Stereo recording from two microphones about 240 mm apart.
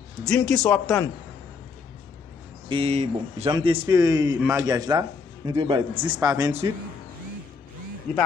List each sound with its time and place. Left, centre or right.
0.2 s a man's voice: centre
2.7 s speech: right